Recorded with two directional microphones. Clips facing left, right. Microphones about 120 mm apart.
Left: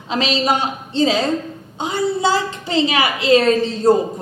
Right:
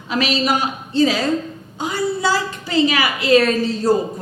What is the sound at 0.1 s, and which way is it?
A woman's voice, 25° left (ahead or behind).